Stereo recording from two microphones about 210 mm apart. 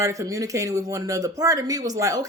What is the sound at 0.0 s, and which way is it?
Speech, 15° right (ahead or behind).